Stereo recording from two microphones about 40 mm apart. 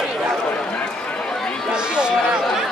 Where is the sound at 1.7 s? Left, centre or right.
Right.